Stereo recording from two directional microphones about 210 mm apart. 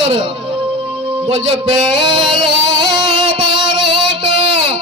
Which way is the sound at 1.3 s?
25° right (ahead or behind).